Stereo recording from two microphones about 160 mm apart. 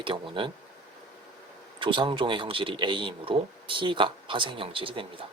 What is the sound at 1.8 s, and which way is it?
Speech, 30° right (ahead or behind).